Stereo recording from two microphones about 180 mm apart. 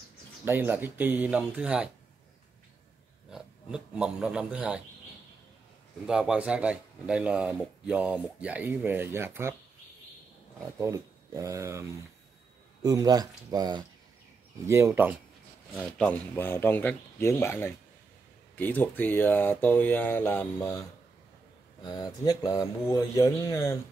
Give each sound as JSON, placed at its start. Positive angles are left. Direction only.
{"t": 0.5, "sound": "speech", "side_deg": -10}
{"t": 3.3, "sound": "a man's voice", "side_deg": -5}
{"t": 6.0, "sound": "speech", "side_deg": -5}
{"t": 10.8, "sound": "speech", "side_deg": -15}
{"t": 15.8, "sound": "speech", "side_deg": 5}
{"t": 21.8, "sound": "speech", "side_deg": 20}